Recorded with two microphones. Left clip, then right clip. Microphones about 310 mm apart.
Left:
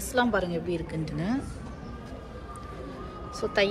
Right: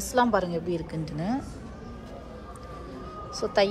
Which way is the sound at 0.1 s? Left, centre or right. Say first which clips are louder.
Right 2 dB; centre.